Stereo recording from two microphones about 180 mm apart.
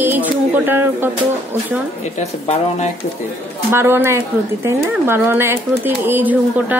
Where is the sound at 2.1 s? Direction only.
35° left (ahead or behind).